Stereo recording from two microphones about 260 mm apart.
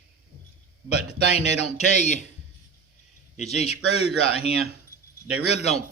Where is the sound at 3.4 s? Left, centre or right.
Left.